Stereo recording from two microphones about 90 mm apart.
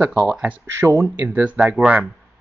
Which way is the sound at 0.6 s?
30° right (ahead or behind).